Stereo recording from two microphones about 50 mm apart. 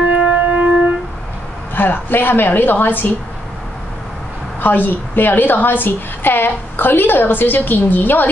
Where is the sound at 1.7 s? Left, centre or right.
Left.